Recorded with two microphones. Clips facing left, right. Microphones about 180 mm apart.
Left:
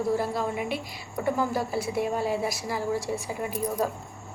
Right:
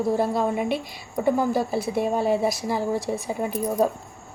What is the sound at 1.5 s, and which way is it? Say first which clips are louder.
A woman's voice: right 4 dB; 25° right (ahead or behind).